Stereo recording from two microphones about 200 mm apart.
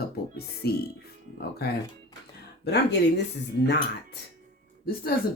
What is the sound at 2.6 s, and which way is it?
Speech, 55° left (ahead or behind).